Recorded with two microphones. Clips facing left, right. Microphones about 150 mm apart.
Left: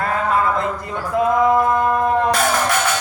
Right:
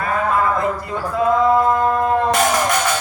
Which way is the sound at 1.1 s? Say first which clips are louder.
Even; 15° left (ahead or behind).